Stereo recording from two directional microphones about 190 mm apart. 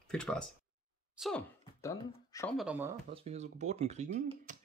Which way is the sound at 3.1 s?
35° right (ahead or behind).